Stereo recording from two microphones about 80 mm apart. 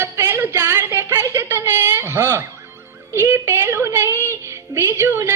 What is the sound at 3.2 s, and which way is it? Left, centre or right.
A woman's voice, right.